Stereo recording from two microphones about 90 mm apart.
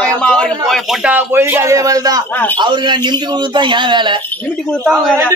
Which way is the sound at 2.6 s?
60° right (ahead or behind).